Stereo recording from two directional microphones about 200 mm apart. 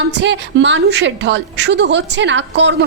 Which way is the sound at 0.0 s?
65° right (ahead or behind).